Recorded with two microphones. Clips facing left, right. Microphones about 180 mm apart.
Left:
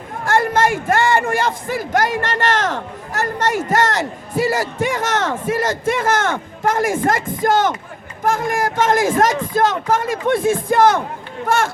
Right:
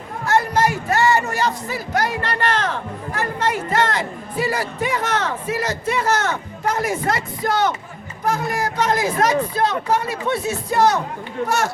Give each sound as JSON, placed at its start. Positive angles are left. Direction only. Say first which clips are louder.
{"t": 0.3, "sound": "speech", "louder": "left 2 dB", "side_deg": 50}